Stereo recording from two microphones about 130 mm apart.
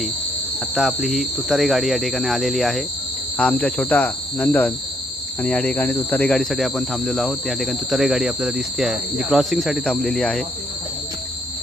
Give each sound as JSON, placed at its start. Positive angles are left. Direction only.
{"t": 0.8, "sound": "speech", "side_deg": 0}
{"t": 3.3, "sound": "cricket", "side_deg": 10}
{"t": 5.4, "sound": "speech", "side_deg": 5}